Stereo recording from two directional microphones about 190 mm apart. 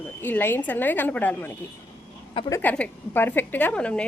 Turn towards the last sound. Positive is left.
turn(degrees=5)  # may be behind; listen again after turning